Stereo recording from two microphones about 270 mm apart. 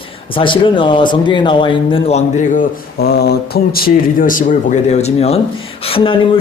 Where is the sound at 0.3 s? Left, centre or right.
Centre.